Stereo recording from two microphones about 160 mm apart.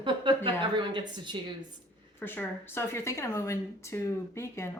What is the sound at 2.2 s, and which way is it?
A woman's voice, 15° left (ahead or behind).